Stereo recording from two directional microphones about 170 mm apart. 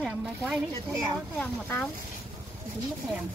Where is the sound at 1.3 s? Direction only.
10° left (ahead or behind).